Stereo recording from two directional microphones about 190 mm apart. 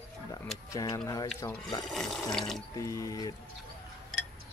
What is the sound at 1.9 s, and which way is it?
Water, centre (ahead or behind).